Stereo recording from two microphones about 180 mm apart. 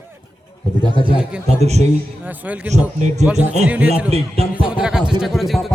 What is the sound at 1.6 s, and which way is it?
Speech, 35° right (ahead or behind).